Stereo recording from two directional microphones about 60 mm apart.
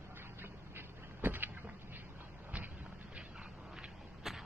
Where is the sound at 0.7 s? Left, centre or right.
Right.